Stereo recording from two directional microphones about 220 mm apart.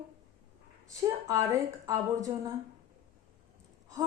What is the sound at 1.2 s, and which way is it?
A woman's voice, 15° right (ahead or behind).